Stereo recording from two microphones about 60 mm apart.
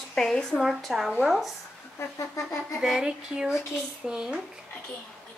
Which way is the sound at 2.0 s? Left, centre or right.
Left.